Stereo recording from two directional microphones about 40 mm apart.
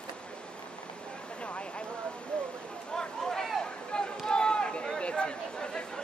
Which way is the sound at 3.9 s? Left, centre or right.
Left.